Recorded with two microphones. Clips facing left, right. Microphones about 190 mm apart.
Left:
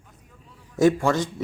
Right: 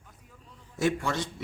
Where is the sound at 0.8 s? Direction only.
45° left (ahead or behind).